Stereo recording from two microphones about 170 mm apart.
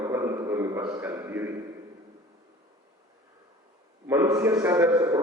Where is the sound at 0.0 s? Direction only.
15° right (ahead or behind).